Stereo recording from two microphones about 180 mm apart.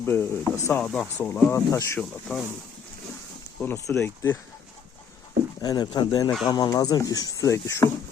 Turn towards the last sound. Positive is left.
turn(degrees=15)  # may be behind; listen again after turning